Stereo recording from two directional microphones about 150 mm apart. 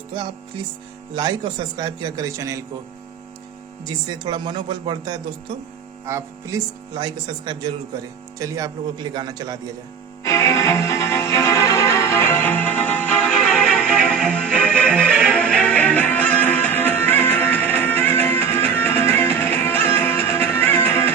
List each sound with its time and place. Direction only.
0.2 s music: 35° right (ahead or behind)
1.1 s speech: 30° right (ahead or behind)
3.8 s speech: 30° right (ahead or behind)
10.2 s music: 20° left (ahead or behind)